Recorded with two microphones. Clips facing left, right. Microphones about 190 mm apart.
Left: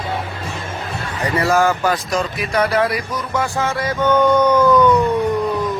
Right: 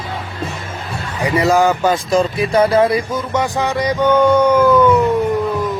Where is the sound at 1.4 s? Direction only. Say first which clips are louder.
Right 3 dB; 20° right (ahead or behind).